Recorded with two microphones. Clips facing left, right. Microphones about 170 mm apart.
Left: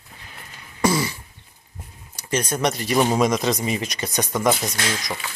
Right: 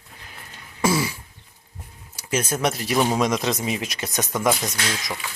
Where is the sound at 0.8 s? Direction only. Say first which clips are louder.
Left 1 dB; 5° right (ahead or behind).